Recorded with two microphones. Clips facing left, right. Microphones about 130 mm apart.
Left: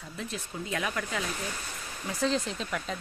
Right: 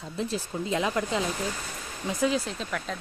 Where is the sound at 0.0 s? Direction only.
30° right (ahead or behind).